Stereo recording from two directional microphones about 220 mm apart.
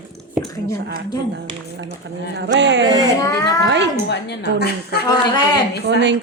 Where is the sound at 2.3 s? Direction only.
50° right (ahead or behind).